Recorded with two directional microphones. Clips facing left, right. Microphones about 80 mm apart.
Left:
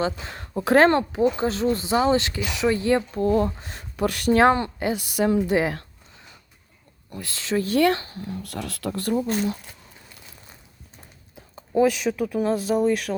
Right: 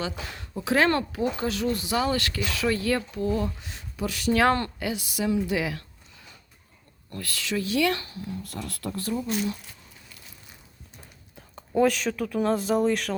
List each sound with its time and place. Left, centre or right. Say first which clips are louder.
0.0 s speech: left 6 dB; left
0.5 s speech: left 6 dB; left
0.9 s speech: left 5 dB; left
3.1 s speech: left 6 dB; left
4.3 s speech: left 4 dB; left
4.9 s speech: left 5 dB; left
7.1 s speech: left 4 dB; left
8.2 s speech: left 3 dB; left
9.1 s speech: left 4 dB; left
11.3 s speech: left 3 dB; centre